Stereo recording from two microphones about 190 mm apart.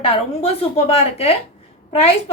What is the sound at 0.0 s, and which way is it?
A woman's voice, 30° left (ahead or behind).